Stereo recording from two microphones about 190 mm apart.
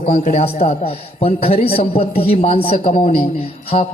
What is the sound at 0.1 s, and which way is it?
Mantra, 35° left (ahead or behind).